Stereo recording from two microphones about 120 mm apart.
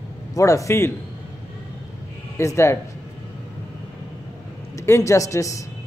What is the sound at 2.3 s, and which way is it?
Speech, 25° left (ahead or behind).